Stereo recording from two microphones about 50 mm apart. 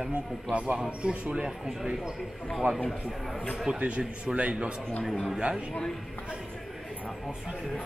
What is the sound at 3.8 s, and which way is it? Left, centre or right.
Speech, right.